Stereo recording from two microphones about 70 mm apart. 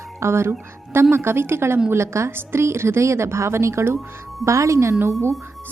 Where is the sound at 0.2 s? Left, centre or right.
Right.